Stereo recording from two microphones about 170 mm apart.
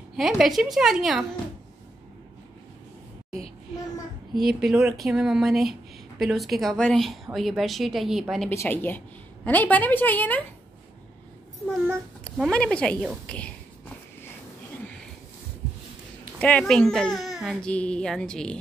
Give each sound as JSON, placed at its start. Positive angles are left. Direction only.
{"t": 0.1, "sound": "speech", "side_deg": 0}
{"t": 3.3, "sound": "child singing", "side_deg": 35}
{"t": 4.4, "sound": "speech", "side_deg": 0}
{"t": 8.5, "sound": "a woman's voice", "side_deg": 10}
{"t": 12.4, "sound": "speech", "side_deg": 5}
{"t": 16.3, "sound": "speech", "side_deg": 5}